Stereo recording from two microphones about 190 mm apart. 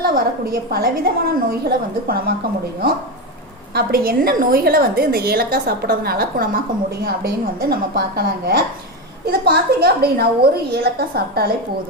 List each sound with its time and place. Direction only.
0.0 s a woman's voice: 50° right (ahead or behind)
2.8 s a woman's voice: 50° right (ahead or behind)